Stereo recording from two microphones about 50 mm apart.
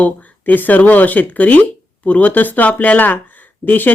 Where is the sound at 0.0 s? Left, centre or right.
Left.